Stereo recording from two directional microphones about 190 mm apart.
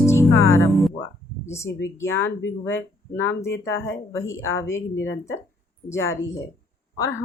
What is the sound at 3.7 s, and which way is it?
Speech, 85° left.